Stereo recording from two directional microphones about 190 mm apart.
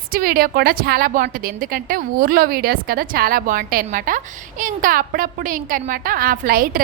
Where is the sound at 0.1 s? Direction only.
50° right (ahead or behind).